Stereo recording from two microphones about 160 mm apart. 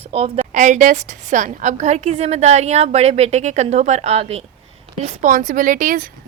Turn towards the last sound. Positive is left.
turn(degrees=-60)  # may be behind; listen again after turning